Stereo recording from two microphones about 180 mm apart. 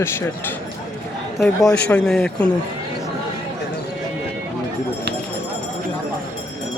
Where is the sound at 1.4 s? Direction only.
20° left (ahead or behind).